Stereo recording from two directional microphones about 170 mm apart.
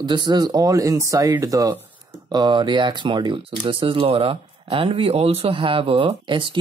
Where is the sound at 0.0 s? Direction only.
25° right (ahead or behind).